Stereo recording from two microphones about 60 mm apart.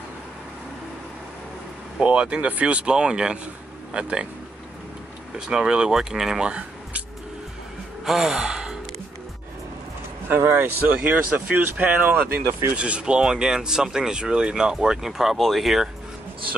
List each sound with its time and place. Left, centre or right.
2.0 s speech: centre
5.5 s speech: centre
8.0 s speech: centre
10.2 s speech: right
11.0 s speech: centre
12.7 s speech: centre